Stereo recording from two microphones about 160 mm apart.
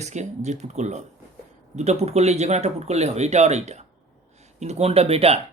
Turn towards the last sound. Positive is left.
turn(degrees=-40)  # may be behind; listen again after turning